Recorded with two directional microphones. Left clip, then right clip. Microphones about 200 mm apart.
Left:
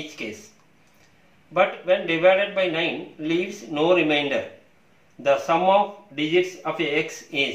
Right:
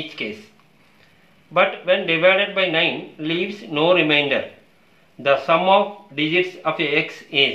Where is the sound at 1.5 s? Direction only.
20° right (ahead or behind).